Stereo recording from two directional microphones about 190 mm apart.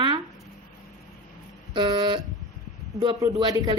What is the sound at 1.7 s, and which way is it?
A woman's voice, 25° right (ahead or behind).